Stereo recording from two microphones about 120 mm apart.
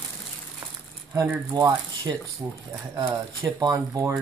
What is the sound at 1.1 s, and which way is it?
Speech, 15° right (ahead or behind).